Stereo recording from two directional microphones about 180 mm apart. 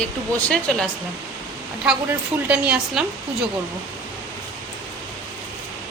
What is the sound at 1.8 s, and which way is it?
A woman's voice, 5° right (ahead or behind).